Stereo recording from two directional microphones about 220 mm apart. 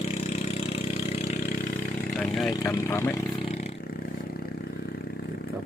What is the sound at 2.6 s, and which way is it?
Speech, 15° left (ahead or behind).